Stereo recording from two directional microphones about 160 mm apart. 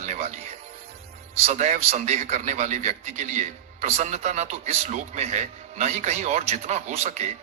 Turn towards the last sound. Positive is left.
turn(degrees=-45)  # may be behind; listen again after turning